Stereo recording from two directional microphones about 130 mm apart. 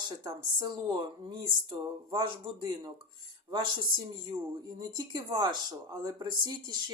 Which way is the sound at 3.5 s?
40° right (ahead or behind).